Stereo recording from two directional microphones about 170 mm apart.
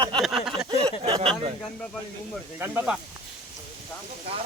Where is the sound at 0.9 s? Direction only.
30° right (ahead or behind).